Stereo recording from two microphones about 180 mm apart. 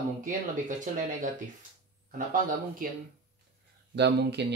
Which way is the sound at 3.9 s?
70° right (ahead or behind).